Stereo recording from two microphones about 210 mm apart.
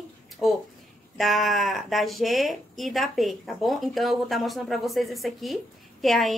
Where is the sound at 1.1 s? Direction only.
Centre (ahead or behind).